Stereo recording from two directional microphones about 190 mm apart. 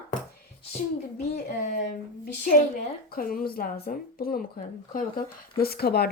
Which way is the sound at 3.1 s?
50° left (ahead or behind).